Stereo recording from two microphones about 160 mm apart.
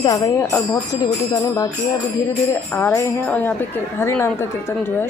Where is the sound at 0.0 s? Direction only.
25° left (ahead or behind).